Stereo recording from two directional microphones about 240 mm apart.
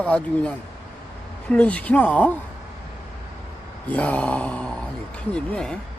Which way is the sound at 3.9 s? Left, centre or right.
Centre.